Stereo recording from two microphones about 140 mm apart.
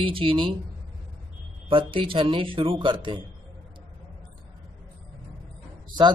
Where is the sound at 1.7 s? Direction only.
40° right (ahead or behind).